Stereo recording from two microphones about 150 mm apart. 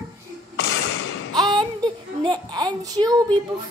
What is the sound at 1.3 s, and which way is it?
Speech, 30° right (ahead or behind).